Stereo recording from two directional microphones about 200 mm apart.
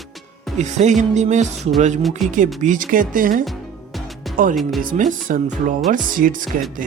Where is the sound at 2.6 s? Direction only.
40° right (ahead or behind).